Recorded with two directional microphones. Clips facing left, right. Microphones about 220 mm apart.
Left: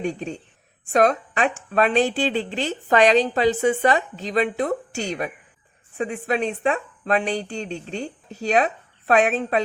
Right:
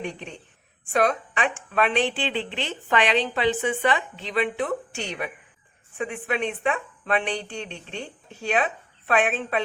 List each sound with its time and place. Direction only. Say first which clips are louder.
0.0 s a woman's voice: left 7 dB; 40° left (ahead or behind)